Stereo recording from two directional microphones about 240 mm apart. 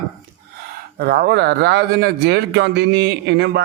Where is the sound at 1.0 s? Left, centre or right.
Right.